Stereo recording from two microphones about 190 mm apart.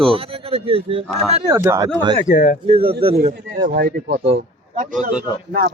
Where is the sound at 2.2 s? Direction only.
45° left (ahead or behind).